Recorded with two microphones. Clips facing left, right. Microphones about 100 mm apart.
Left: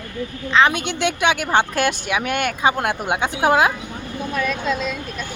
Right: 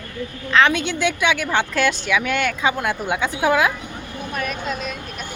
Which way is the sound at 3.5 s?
35° left (ahead or behind).